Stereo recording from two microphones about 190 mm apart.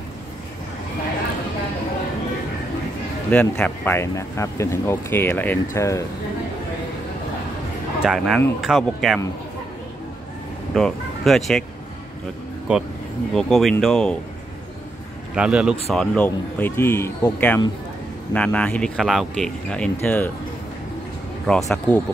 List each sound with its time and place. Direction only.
3.3 s speech: 10° left (ahead or behind)
8.0 s speech: 5° right (ahead or behind)
10.7 s speech: centre (ahead or behind)
12.7 s speech: 5° right (ahead or behind)
15.3 s speech: 5° right (ahead or behind)
21.5 s speech: 5° left (ahead or behind)